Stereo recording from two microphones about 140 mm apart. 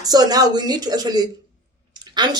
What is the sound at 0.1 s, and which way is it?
A man's voice, 30° right (ahead or behind).